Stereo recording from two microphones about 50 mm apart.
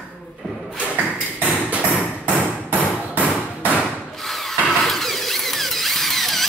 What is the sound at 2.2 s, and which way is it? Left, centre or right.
Hammer, right.